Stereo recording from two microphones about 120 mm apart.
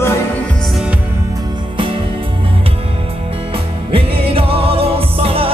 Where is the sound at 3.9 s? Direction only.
50° right (ahead or behind).